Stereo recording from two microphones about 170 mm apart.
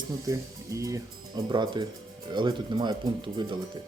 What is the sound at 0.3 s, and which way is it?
Speech, 20° right (ahead or behind).